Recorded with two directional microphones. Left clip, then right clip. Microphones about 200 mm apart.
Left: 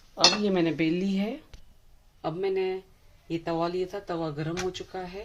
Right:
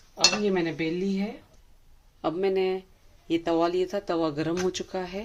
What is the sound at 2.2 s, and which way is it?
Speech, 35° right (ahead or behind).